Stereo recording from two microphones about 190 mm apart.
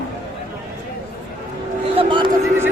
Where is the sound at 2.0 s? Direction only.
25° right (ahead or behind).